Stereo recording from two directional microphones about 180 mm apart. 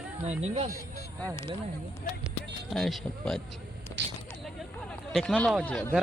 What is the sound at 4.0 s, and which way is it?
Speech, 80° right.